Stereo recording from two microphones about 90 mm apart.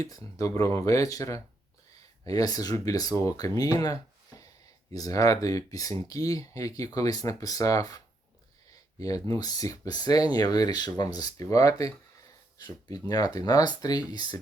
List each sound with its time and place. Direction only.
0.0 s speech: 40° left (ahead or behind)
4.9 s speech: 40° left (ahead or behind)